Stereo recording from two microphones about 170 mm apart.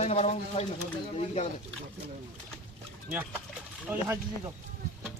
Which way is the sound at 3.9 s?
10° right (ahead or behind).